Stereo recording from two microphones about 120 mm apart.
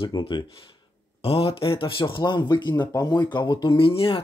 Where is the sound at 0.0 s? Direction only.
45° left (ahead or behind).